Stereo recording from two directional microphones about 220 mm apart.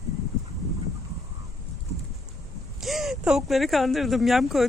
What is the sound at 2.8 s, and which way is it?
Speech, centre (ahead or behind).